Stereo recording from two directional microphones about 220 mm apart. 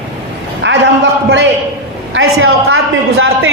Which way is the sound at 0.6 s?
55° right (ahead or behind).